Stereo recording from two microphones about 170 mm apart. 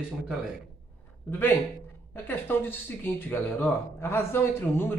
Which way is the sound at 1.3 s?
10° left (ahead or behind).